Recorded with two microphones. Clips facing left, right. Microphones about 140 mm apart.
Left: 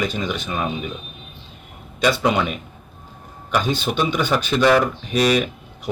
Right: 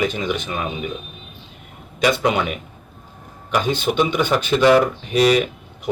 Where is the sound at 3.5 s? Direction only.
20° right (ahead or behind).